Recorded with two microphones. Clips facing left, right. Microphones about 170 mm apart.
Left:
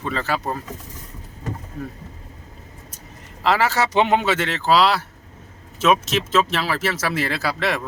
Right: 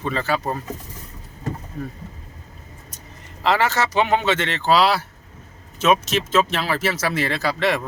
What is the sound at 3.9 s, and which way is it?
Speech, 20° left (ahead or behind).